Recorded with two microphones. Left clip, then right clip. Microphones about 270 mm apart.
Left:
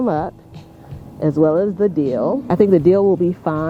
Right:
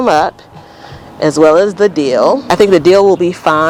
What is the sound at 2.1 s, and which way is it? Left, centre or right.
Speech, right.